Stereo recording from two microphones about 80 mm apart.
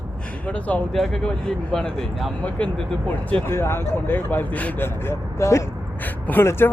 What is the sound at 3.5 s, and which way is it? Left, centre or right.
Speech, left.